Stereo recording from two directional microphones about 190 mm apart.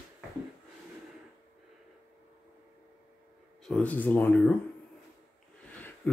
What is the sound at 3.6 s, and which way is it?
Speech, 5° left (ahead or behind).